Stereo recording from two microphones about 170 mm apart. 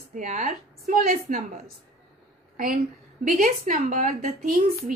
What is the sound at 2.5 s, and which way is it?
A woman's voice, 55° right (ahead or behind).